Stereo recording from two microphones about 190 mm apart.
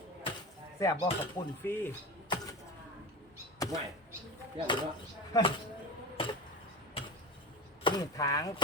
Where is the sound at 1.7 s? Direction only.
10° left (ahead or behind).